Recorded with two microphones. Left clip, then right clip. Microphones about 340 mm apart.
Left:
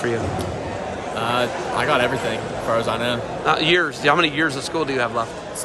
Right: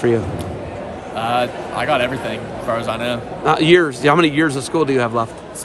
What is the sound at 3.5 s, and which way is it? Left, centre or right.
Speech, centre.